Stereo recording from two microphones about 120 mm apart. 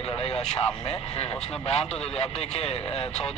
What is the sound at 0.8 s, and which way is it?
Speech, 60° left (ahead or behind).